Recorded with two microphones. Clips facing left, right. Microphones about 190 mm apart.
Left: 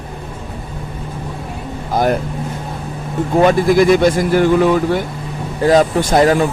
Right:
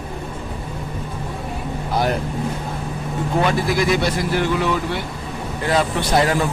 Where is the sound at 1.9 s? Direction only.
50° left (ahead or behind).